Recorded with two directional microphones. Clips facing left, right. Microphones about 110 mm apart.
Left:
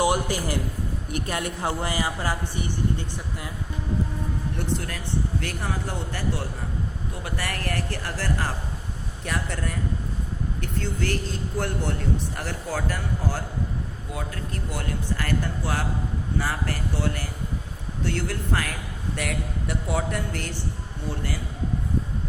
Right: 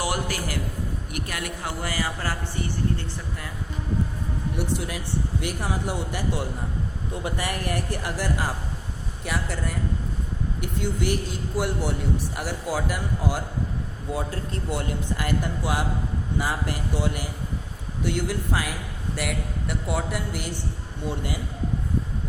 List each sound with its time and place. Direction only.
0.0 s a man's voice: 20° left (ahead or behind)
4.5 s a man's voice: 10° right (ahead or behind)
10.6 s a man's voice: 15° right (ahead or behind)
14.1 s a man's voice: 30° right (ahead or behind); by 20.6 s 10° right (ahead or behind)